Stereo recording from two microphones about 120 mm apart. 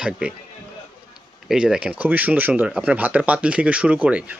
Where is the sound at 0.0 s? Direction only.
5° right (ahead or behind).